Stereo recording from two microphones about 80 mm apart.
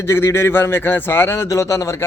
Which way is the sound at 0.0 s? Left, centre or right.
Left.